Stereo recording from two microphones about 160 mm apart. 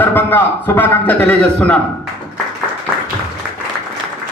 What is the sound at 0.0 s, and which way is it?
A man's voice, 10° left (ahead or behind).